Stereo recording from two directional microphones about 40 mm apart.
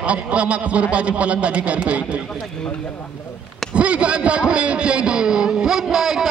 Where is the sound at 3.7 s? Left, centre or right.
Right.